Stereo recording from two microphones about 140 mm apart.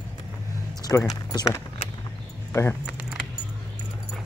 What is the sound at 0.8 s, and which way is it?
Music, 25° left (ahead or behind).